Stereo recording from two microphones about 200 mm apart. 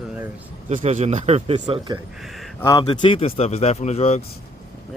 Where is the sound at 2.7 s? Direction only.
20° left (ahead or behind).